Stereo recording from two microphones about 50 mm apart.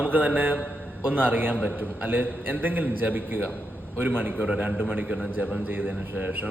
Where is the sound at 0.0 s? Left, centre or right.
Right.